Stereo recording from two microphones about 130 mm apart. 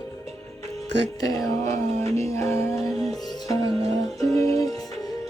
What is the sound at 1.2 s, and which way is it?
Music, 25° left (ahead or behind).